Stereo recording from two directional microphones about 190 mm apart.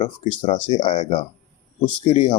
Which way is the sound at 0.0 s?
25° left (ahead or behind).